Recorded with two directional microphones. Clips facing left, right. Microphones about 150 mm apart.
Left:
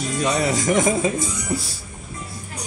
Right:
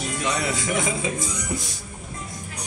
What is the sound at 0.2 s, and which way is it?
Speech, 40° left (ahead or behind).